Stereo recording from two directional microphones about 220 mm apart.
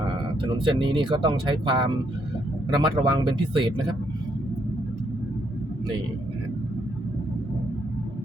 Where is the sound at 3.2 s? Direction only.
20° right (ahead or behind).